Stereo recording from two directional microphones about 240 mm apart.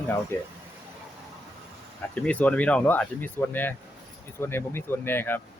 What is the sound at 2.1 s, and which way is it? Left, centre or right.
Speech, centre.